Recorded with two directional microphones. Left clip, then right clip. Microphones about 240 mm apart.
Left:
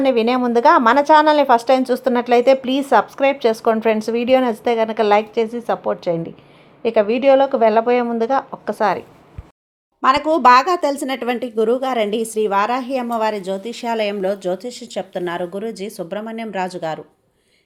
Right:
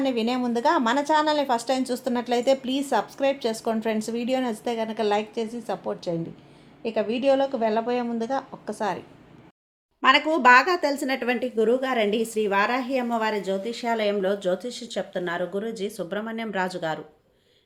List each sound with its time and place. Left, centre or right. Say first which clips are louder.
0.0 s speech: left 9 dB; centre
10.0 s speech: left 5 dB; centre